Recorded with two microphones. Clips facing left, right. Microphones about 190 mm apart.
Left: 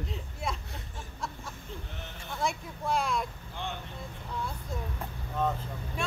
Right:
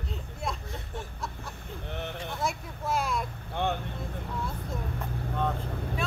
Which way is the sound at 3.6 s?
65° right (ahead or behind).